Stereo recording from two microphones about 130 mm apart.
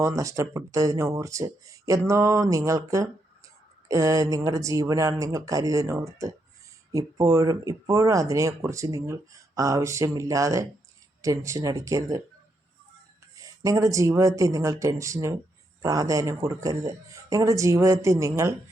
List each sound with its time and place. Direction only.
0.0 s speech: 25° right (ahead or behind)
13.3 s speech: 25° right (ahead or behind)